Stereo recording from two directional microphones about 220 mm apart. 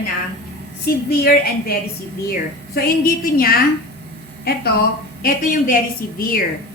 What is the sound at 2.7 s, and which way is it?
Speech, 40° left (ahead or behind).